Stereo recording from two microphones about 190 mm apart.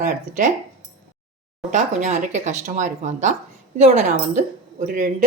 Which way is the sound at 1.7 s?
40° right (ahead or behind).